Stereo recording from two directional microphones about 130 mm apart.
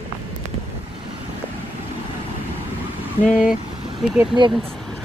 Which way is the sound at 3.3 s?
5° right (ahead or behind).